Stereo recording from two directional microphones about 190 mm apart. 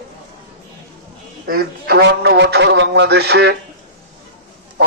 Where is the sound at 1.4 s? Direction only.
55° right (ahead or behind).